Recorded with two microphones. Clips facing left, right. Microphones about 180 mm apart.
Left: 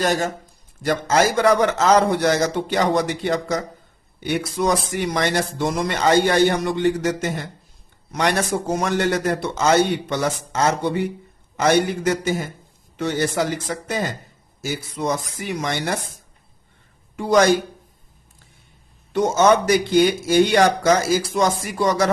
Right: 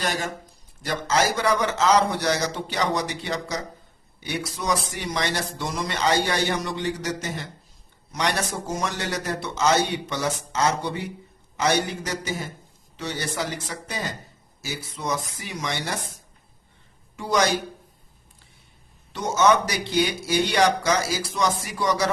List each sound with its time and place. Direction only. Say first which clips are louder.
0.0 s speech: left 7 dB; 45° left (ahead or behind)
17.2 s speech: left 7 dB; 55° left (ahead or behind)
19.1 s speech: left 4 dB; 50° left (ahead or behind)